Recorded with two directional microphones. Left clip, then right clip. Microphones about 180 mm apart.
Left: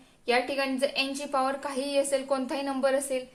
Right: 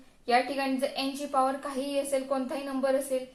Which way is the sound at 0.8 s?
60° left (ahead or behind).